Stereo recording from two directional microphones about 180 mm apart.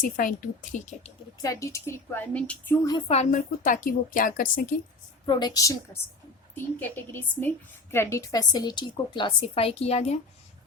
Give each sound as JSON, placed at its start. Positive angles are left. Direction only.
{"t": 0.0, "sound": "a woman's voice", "side_deg": 50}
{"t": 1.4, "sound": "a woman's voice", "side_deg": 20}
{"t": 3.1, "sound": "a woman's voice", "side_deg": 40}
{"t": 5.2, "sound": "a woman's voice", "side_deg": 25}